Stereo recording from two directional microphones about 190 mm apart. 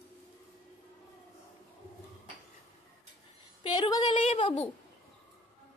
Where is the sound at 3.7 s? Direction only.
25° left (ahead or behind).